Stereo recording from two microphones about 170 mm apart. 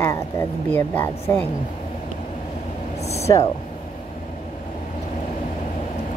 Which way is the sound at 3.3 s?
25° left (ahead or behind).